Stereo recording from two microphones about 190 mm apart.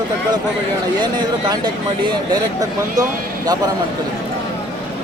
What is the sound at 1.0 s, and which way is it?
Speech, 25° right (ahead or behind).